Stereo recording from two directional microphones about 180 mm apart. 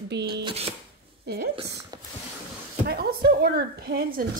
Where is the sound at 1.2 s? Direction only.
65° right (ahead or behind).